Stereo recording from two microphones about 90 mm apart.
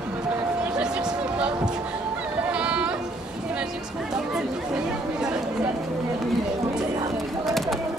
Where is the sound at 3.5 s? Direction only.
5° right (ahead or behind).